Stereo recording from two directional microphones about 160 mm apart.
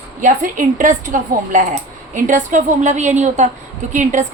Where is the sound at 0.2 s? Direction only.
55° right (ahead or behind).